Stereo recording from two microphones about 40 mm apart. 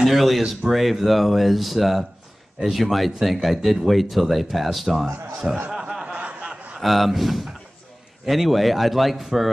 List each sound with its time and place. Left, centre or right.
0.0 s speech: centre
5.7 s snicker: centre
6.1 s a sound: right
6.8 s speech: centre